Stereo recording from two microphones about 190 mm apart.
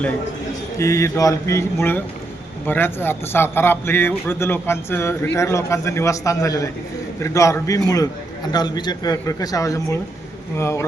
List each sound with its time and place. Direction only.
0.8 s a man's voice: 15° left (ahead or behind)